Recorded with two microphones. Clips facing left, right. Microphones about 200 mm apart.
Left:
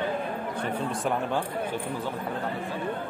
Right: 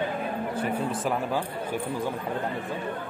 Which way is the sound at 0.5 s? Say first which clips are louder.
Right 2 dB; 5° right (ahead or behind).